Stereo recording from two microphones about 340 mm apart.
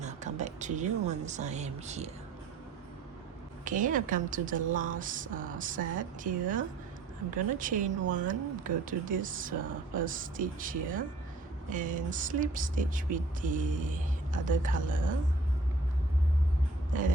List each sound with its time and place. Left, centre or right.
0.0 s speech: right
3.6 s speech: right
7.3 s speech: right